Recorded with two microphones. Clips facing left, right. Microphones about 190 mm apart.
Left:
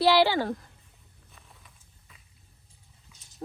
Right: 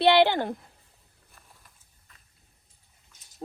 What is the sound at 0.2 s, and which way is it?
Speech, 20° right (ahead or behind).